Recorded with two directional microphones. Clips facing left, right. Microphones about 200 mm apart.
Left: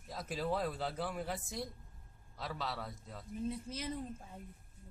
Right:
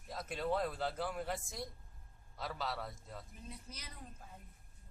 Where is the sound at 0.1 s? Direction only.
Centre (ahead or behind).